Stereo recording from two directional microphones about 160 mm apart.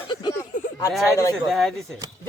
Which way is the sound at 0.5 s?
55° left (ahead or behind).